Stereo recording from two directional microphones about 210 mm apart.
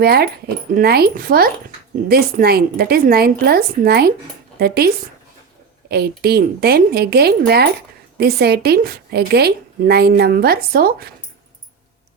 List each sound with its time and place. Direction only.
0.0 s a woman's voice: 50° right (ahead or behind)
5.9 s a woman's voice: 50° right (ahead or behind)